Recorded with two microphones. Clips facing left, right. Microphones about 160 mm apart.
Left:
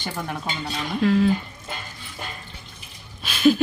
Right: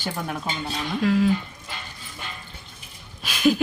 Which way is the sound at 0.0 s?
Centre (ahead or behind).